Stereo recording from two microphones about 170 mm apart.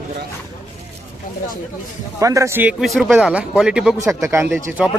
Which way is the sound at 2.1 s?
20° right (ahead or behind).